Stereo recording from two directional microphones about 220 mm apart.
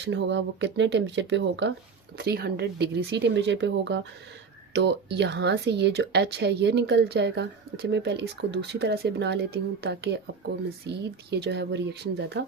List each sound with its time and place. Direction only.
0.0 s speech: 55° right (ahead or behind)